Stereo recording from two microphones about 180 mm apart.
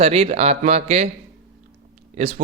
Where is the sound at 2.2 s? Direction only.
40° right (ahead or behind).